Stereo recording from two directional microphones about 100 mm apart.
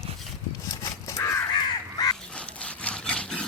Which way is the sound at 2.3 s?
10° left (ahead or behind).